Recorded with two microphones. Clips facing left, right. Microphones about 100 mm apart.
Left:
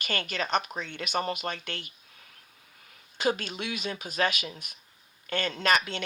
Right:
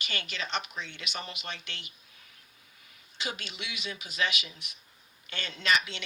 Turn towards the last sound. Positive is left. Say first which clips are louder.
# left 3 dB
turn(degrees=45)  # may be behind; listen again after turning